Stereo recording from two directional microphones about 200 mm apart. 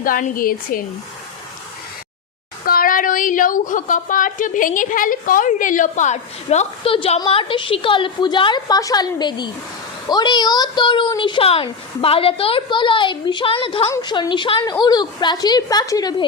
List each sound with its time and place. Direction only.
0.0 s a woman's voice: 45° left (ahead or behind)
2.6 s a woman's voice: 45° left (ahead or behind); by 16.2 s 20° left (ahead or behind)